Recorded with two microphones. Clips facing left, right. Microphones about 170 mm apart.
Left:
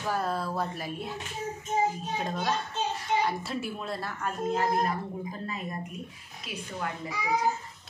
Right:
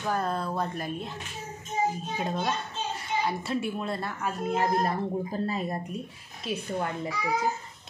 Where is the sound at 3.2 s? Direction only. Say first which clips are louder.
Right 2 dB; centre (ahead or behind).